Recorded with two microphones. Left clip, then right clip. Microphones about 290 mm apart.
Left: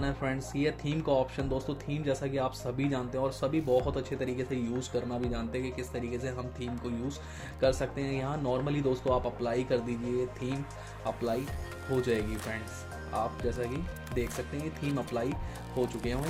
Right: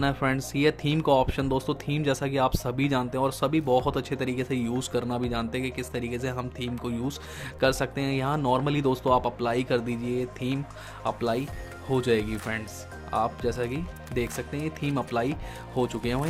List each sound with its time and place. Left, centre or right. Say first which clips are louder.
0.0 s speech: right 7 dB; right